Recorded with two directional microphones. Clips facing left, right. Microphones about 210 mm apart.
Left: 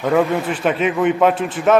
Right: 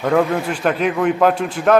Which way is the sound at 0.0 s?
Centre (ahead or behind).